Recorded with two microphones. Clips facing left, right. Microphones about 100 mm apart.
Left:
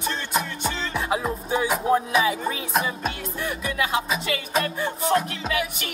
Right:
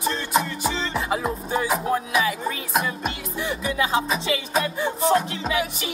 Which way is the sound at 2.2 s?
25° left (ahead or behind).